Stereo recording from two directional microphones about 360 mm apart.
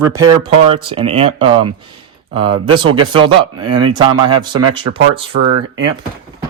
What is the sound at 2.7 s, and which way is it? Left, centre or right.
Speech, centre.